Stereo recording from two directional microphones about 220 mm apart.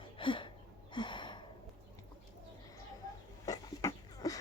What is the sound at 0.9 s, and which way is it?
Gasp, 20° left (ahead or behind).